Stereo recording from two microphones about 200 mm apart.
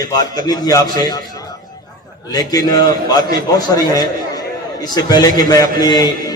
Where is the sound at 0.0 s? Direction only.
20° left (ahead or behind).